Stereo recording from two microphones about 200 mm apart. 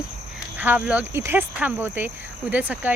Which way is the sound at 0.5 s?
10° right (ahead or behind).